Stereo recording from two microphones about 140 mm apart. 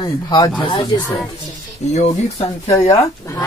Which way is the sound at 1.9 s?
50° left (ahead or behind).